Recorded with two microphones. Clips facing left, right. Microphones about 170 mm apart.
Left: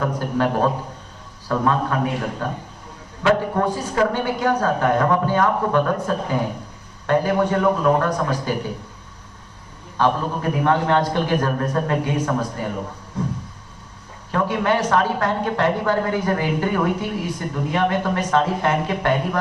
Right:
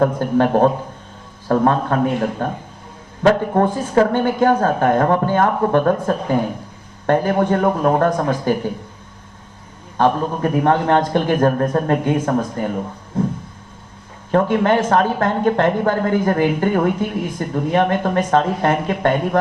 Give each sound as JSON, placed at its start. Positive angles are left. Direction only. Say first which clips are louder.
{"t": 0.0, "sound": "speech", "louder": "right 6 dB", "side_deg": -45}
{"t": 3.2, "sound": "speech", "louder": "right 4 dB", "side_deg": -40}
{"t": 10.0, "sound": "speech", "louder": "right 4 dB", "side_deg": -45}
{"t": 13.2, "sound": "a sound", "louder": "right 6 dB", "side_deg": -50}
{"t": 14.5, "sound": "speech", "louder": "right 2 dB", "side_deg": -50}